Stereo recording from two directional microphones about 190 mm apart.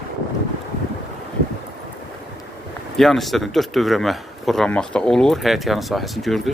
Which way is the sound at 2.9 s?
Centre (ahead or behind).